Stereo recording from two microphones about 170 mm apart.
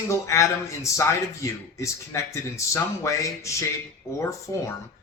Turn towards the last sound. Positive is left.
turn(degrees=15)  # may be behind; listen again after turning